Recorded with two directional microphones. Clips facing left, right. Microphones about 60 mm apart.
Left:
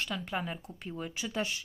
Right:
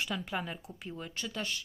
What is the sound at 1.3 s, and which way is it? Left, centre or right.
Speech, centre.